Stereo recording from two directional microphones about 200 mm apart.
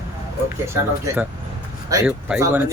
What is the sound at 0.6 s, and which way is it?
Speech, 15° right (ahead or behind).